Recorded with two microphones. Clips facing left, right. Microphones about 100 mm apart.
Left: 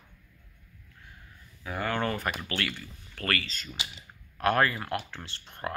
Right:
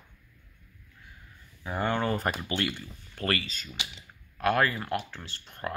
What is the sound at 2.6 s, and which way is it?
Speech, 20° right (ahead or behind).